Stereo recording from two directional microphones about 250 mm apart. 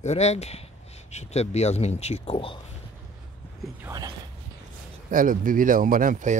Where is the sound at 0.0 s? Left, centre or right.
Left.